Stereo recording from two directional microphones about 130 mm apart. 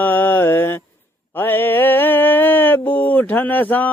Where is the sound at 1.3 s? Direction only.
15° left (ahead or behind).